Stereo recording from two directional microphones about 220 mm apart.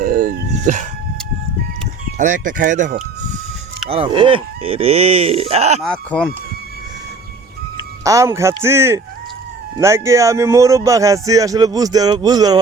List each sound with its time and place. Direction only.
0.0 s dog: 40° right (ahead or behind)
2.1 s speech: 35° right (ahead or behind)
3.8 s speech: 25° right (ahead or behind)
5.8 s speech: 5° left (ahead or behind)
8.0 s speech: 15° right (ahead or behind)